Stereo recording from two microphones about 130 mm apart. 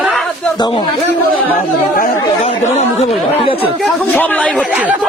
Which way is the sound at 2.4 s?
55° left (ahead or behind).